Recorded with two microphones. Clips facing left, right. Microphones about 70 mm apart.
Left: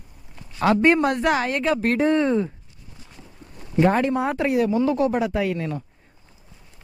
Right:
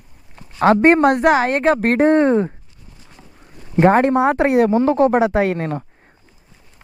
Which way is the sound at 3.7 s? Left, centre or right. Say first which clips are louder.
Right 6 dB; right.